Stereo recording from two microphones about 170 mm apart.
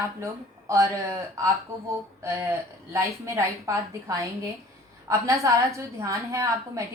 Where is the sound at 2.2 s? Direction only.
15° right (ahead or behind).